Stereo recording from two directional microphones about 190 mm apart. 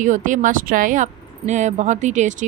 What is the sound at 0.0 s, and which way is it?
Speech, 40° right (ahead or behind).